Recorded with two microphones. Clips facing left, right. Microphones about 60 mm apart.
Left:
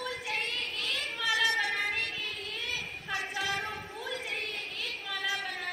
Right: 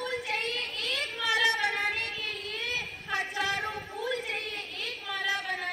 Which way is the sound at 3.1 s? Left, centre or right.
Right.